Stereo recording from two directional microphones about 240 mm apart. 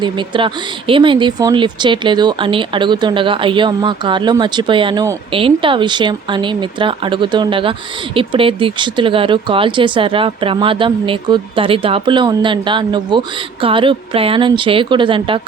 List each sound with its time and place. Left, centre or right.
0.0 s speech: centre